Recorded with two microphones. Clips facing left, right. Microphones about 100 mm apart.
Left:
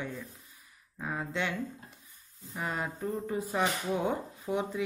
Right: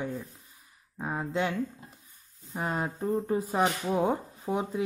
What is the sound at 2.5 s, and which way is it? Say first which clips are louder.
Speech: right 3 dB; 40° right (ahead or behind).